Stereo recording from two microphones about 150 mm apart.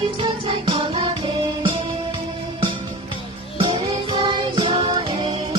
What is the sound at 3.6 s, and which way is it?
Music, 30° right (ahead or behind).